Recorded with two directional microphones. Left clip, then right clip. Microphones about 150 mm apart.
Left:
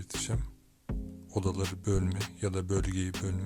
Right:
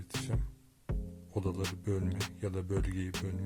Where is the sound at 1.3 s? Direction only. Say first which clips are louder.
Left 3 dB; 30° left (ahead or behind).